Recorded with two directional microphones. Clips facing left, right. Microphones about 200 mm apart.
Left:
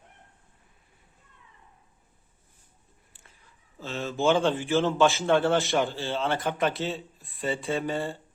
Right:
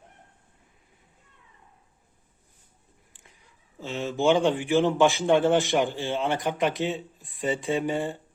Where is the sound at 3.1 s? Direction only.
15° right (ahead or behind).